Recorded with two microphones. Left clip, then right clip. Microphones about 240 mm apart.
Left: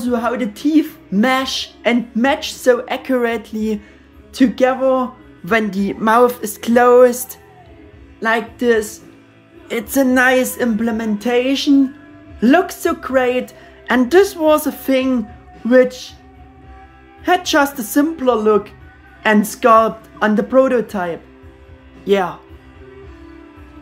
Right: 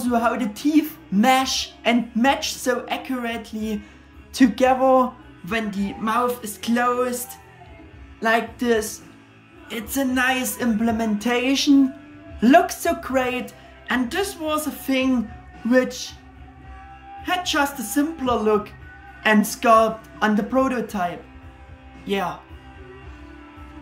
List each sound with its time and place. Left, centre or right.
0.0 s speech: centre
5.5 s speech: centre
17.2 s speech: centre